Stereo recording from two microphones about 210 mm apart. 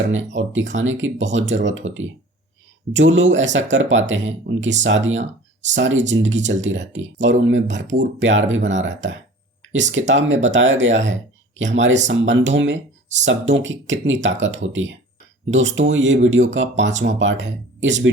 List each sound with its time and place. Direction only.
0.0 s speech: 65° right (ahead or behind)
2.9 s speech: 65° right (ahead or behind)